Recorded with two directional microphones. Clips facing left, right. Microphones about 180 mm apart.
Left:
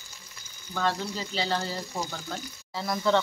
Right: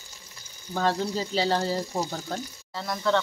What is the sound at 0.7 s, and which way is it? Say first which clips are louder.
Speech: right 3 dB; 35° right (ahead or behind).